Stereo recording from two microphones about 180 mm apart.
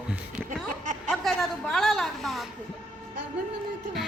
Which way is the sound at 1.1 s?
Centre (ahead or behind).